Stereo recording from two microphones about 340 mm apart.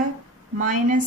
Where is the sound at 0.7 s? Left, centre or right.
Right.